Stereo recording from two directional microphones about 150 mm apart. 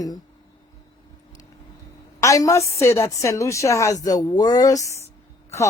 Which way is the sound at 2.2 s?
20° left (ahead or behind).